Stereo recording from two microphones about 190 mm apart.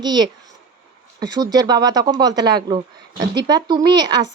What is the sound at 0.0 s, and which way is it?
A woman's voice, 20° right (ahead or behind).